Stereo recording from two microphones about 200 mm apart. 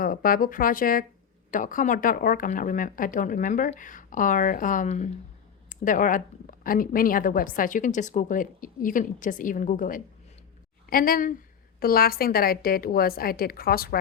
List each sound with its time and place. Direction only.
0.0 s a woman's voice: 45° left (ahead or behind)